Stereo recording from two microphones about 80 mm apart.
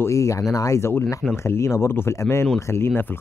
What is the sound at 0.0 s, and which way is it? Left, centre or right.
Speech, left.